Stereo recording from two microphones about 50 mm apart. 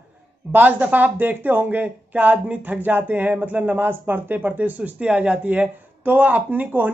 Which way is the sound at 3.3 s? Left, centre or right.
Right.